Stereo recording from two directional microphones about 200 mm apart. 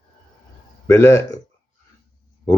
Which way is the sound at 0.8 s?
15° left (ahead or behind).